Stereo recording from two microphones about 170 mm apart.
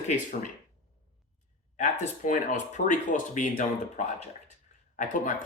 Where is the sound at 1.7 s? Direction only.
45° left (ahead or behind).